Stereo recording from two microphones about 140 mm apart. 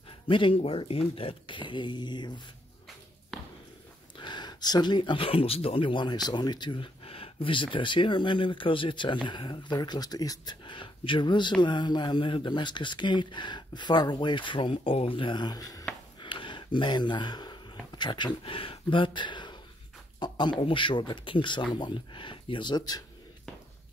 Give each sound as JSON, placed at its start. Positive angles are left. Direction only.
{"t": 0.3, "sound": "speech", "side_deg": 40}
{"t": 3.3, "sound": "a sound", "side_deg": 0}
{"t": 4.2, "sound": "speech", "side_deg": 30}